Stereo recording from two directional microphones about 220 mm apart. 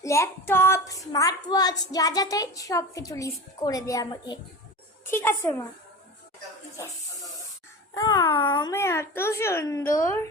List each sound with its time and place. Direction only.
0.0 s child singing: 15° left (ahead or behind)
7.9 s child singing: 15° left (ahead or behind)